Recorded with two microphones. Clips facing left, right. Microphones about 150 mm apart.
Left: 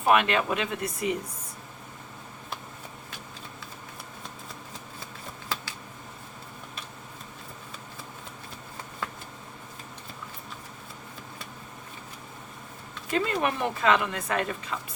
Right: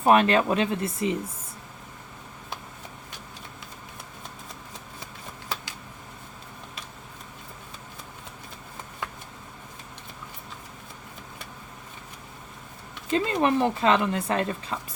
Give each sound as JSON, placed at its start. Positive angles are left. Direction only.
{"t": 0.0, "sound": "speech", "side_deg": -35}
{"t": 13.1, "sound": "speech", "side_deg": -25}